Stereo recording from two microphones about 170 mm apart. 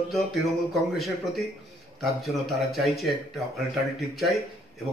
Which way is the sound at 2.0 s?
Centre (ahead or behind).